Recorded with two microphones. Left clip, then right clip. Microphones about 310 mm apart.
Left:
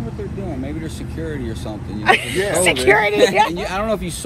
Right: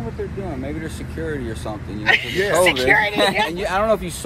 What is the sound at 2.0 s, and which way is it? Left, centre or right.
Speech, centre.